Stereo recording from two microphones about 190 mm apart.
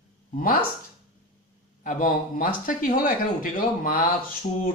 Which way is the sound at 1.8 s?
45° left (ahead or behind).